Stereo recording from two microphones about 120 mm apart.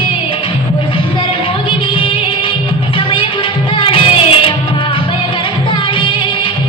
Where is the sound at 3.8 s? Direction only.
45° left (ahead or behind).